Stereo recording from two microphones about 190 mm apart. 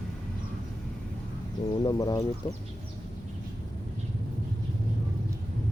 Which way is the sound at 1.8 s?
20° left (ahead or behind).